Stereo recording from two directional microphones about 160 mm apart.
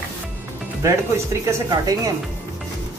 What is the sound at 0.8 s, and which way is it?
Speech, 20° right (ahead or behind).